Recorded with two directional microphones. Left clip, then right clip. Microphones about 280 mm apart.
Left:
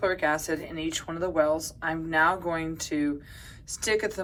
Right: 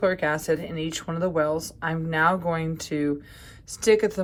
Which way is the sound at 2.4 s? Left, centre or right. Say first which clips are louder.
Right 2 dB; right.